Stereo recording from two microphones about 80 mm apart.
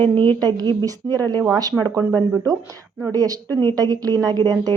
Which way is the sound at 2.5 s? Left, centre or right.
Right.